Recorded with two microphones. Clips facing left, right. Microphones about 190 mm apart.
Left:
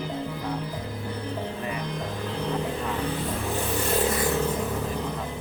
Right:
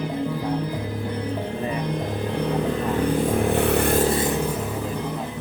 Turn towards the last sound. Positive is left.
turn(degrees=-25)  # may be behind; listen again after turning